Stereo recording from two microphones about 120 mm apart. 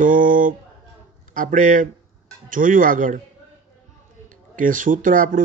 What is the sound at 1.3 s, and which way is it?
Speech, 90° right.